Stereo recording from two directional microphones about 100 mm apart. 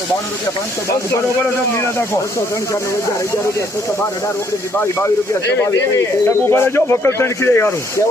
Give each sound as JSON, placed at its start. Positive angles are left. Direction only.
{"t": 4.8, "sound": "speech", "side_deg": 25}
{"t": 6.2, "sound": "speech", "side_deg": 25}